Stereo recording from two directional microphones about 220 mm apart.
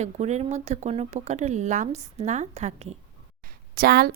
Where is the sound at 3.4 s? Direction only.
40° right (ahead or behind).